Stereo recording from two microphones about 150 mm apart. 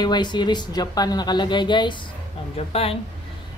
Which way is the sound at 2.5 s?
40° left (ahead or behind).